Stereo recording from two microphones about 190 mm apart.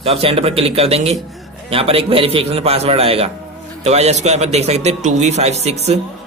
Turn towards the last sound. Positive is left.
turn(degrees=-35)  # may be behind; listen again after turning